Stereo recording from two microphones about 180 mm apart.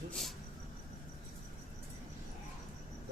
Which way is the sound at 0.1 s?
Centre (ahead or behind).